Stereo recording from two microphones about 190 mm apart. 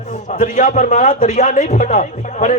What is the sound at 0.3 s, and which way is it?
Speech, 40° left (ahead or behind).